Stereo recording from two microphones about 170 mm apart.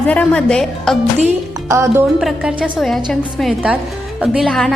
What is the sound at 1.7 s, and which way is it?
Speech, 15° right (ahead or behind).